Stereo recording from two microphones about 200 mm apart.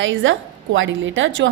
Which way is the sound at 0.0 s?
70° right (ahead or behind).